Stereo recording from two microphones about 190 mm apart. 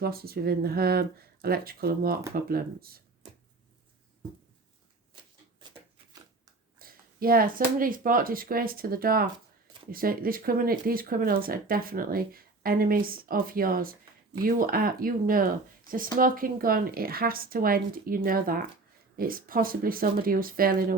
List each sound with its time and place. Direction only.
0.0 s speech: 55° right (ahead or behind)
6.7 s speech: 50° right (ahead or behind)